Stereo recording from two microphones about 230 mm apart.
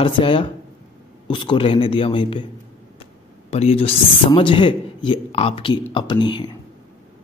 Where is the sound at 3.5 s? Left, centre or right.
Left.